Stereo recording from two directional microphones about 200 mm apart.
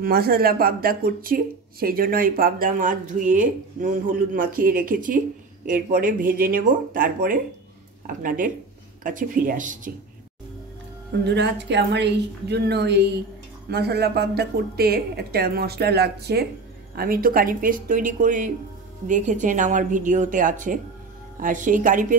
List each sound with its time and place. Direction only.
0.0 s speech: 50° right (ahead or behind)
11.2 s a woman's voice: 60° right (ahead or behind); by 22.0 s 40° right (ahead or behind)